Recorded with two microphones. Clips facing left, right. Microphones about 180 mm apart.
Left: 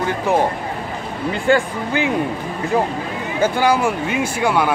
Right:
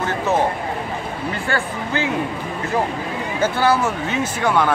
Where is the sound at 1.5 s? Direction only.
20° left (ahead or behind).